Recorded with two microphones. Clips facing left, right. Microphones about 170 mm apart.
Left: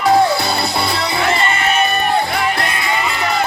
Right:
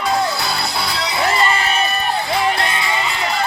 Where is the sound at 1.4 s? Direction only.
30° right (ahead or behind).